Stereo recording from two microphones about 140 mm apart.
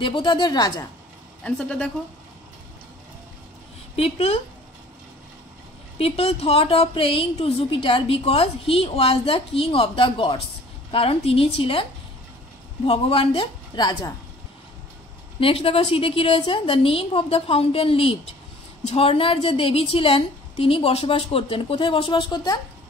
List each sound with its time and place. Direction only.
0.0 s a woman's voice: 35° left (ahead or behind)
1.4 s speech: 10° left (ahead or behind)
3.9 s a woman's voice: 45° left (ahead or behind)
5.9 s a woman's voice: 45° left (ahead or behind)
12.8 s a woman's voice: 45° left (ahead or behind)
15.4 s a woman's voice: 40° left (ahead or behind)